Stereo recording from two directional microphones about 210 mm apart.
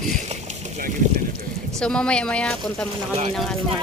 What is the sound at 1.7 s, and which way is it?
Speech, 5° left (ahead or behind).